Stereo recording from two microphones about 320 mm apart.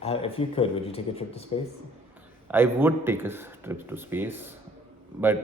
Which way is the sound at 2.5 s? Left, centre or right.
Centre.